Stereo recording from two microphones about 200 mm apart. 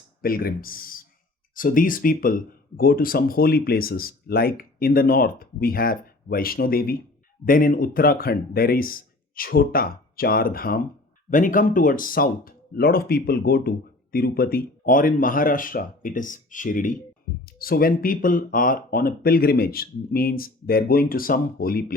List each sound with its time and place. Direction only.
0.2 s speech: 45° left (ahead or behind)